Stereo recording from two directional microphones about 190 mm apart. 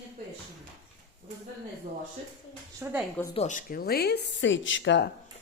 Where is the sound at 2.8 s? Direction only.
10° right (ahead or behind).